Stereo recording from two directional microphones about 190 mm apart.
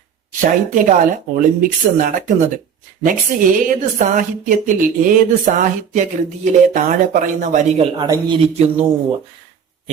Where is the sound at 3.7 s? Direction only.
45° right (ahead or behind).